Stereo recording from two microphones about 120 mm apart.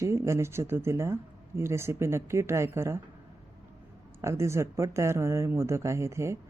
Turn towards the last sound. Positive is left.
turn(degrees=-25)  # may be behind; listen again after turning